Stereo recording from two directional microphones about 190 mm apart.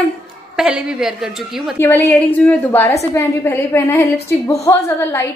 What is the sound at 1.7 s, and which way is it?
A woman's voice, 10° left (ahead or behind).